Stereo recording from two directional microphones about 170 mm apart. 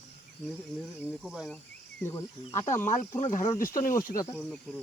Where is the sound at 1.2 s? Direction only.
Centre (ahead or behind).